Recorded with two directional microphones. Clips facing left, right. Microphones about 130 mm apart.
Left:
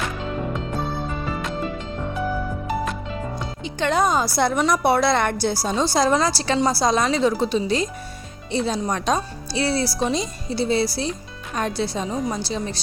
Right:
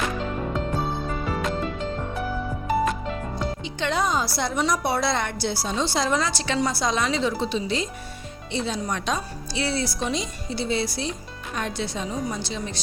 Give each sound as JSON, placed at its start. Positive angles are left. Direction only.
{"t": 3.6, "sound": "a woman's voice", "side_deg": 50}